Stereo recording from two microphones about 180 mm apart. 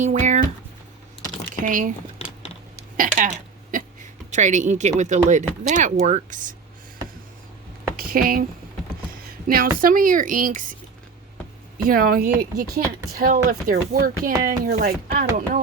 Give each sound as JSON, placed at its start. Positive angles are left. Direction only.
{"t": 0.0, "sound": "a sound", "side_deg": -40}
{"t": 1.6, "sound": "speech", "side_deg": -50}
{"t": 3.0, "sound": "hiccup", "side_deg": -45}
{"t": 4.3, "sound": "speech", "side_deg": -40}
{"t": 7.9, "sound": "speech", "side_deg": -55}
{"t": 9.5, "sound": "speech", "side_deg": -50}
{"t": 11.9, "sound": "speech", "side_deg": -50}